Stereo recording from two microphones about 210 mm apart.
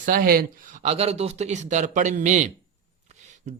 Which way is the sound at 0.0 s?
40° right (ahead or behind).